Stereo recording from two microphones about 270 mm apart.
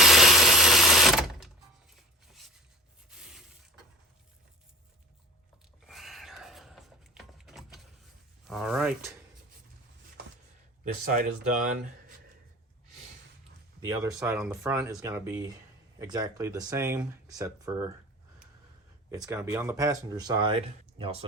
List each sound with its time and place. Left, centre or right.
0.0 s tools: centre
3.1 s rub: centre
5.8 s a sound: centre
11.0 s speech: right
13.8 s speech: centre
14.2 s speech: centre
19.1 s speech: centre